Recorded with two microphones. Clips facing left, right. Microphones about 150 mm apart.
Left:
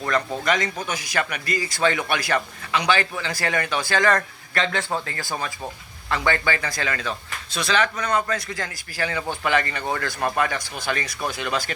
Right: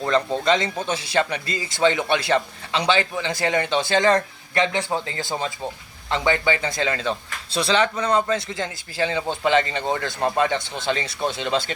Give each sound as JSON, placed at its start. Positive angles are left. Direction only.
{"t": 0.0, "sound": "speech", "side_deg": -25}